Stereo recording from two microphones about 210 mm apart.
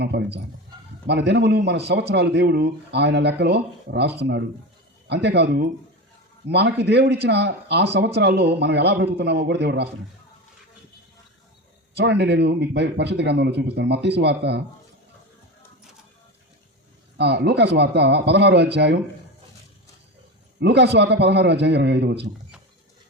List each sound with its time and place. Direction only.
0.0 s speech: 55° right (ahead or behind)
11.9 s speech: 55° right (ahead or behind)
17.2 s speech: 55° right (ahead or behind)
20.6 s speech: 50° right (ahead or behind)